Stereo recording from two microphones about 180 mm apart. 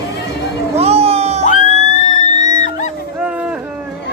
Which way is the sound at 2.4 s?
20° right (ahead or behind).